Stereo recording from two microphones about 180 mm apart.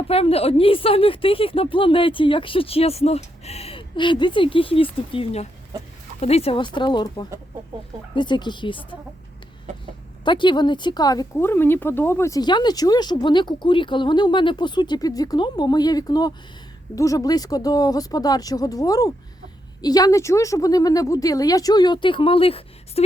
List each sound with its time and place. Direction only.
0.1 s a woman's voice: 35° left (ahead or behind)
10.2 s speech: 25° left (ahead or behind)